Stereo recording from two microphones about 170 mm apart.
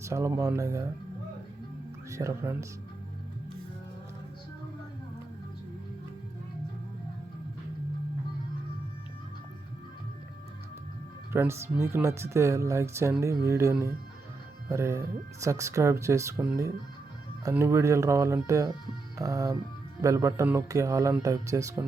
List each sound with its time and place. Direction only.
0.0 s speech: 15° right (ahead or behind)
2.0 s speech: 15° right (ahead or behind)
11.3 s speech: 15° right (ahead or behind)
19.2 s music: 20° right (ahead or behind)
20.0 s speech: 20° right (ahead or behind)